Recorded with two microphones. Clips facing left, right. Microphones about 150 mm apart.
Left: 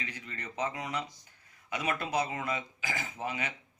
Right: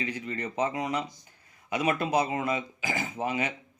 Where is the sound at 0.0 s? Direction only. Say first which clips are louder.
Right 10 dB; 20° right (ahead or behind).